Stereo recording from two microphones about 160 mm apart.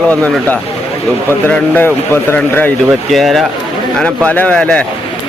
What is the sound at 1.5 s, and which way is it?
A man's voice, 10° left (ahead or behind).